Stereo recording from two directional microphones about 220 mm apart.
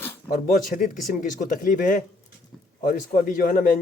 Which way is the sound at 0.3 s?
40° left (ahead or behind).